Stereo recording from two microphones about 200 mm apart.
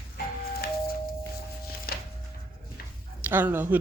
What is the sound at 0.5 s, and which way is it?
Music, 50° left (ahead or behind).